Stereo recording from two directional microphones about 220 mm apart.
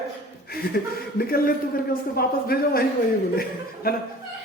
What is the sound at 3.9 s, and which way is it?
Speech, 45° left (ahead or behind).